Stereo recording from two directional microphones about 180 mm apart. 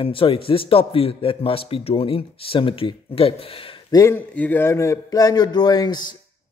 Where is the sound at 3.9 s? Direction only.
15° left (ahead or behind).